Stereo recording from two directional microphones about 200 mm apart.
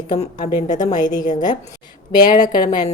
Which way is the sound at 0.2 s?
35° left (ahead or behind).